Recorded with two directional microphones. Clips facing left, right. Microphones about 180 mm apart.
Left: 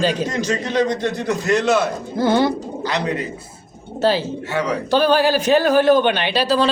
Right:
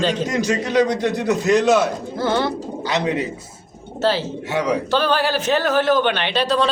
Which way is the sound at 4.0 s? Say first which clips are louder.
Left 2 dB; 15° left (ahead or behind).